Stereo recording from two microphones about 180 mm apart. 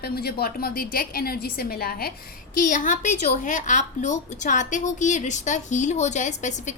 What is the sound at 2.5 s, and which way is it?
A woman's voice, 45° left (ahead or behind).